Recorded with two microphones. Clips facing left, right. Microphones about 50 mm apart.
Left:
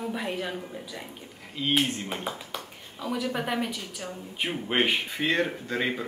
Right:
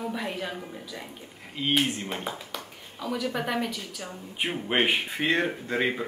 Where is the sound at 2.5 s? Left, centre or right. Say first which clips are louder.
Left 1 dB; centre.